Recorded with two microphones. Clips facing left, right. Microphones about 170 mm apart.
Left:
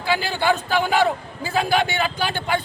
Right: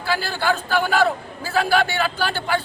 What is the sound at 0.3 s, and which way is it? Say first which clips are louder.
A man's voice: even; 15° left (ahead or behind).